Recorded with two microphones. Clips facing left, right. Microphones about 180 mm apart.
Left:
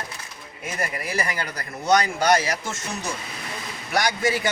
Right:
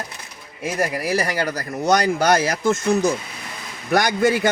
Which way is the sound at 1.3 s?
35° right (ahead or behind).